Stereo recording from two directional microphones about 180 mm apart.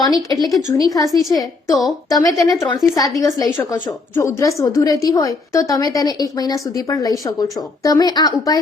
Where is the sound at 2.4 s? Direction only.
20° left (ahead or behind).